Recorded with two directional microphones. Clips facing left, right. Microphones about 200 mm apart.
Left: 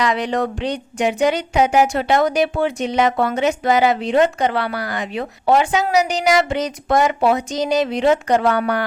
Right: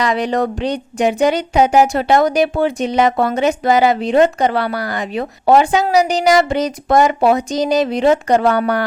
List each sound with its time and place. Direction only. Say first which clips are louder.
0.0 s speech: right 3 dB; 35° right (ahead or behind)